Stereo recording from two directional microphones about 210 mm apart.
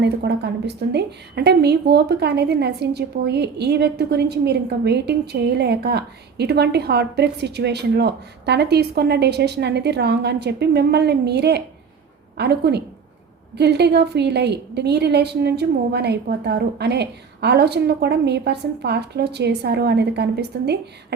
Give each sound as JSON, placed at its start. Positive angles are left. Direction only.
{"t": 0.0, "sound": "a woman's voice", "side_deg": -55}